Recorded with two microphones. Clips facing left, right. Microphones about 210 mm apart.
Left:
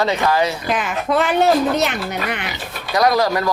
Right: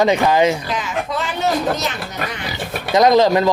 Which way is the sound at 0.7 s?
55° left (ahead or behind).